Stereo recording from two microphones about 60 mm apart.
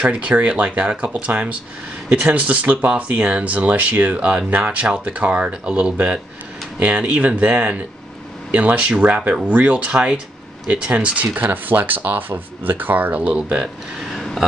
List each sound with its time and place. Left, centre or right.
0.0 s speech: right